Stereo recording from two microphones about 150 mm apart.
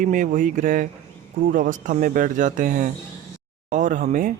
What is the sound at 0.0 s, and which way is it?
Speech, 65° right (ahead or behind).